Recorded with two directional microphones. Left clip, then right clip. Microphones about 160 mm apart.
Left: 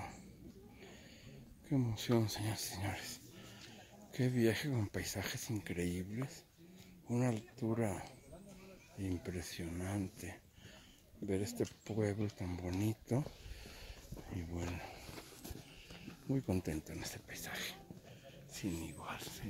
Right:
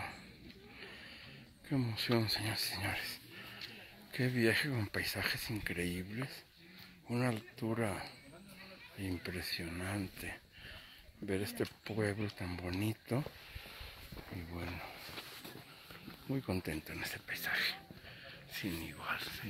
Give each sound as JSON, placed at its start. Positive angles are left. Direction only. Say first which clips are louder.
{"t": 1.7, "sound": "speech", "louder": "right 1 dB", "side_deg": 10}
{"t": 7.1, "sound": "speech", "louder": "right 1 dB", "side_deg": 10}
{"t": 14.5, "sound": "speech", "louder": "right 1 dB", "side_deg": 30}
{"t": 16.3, "sound": "speech", "louder": "even", "side_deg": 20}